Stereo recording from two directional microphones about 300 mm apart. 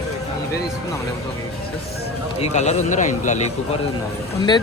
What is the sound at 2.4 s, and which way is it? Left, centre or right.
A man's voice, left.